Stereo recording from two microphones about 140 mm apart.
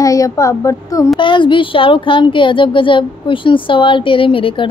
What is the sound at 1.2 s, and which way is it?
A woman's voice, 35° left (ahead or behind).